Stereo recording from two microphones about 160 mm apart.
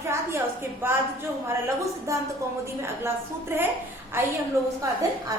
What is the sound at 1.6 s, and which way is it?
Speech, 20° right (ahead or behind).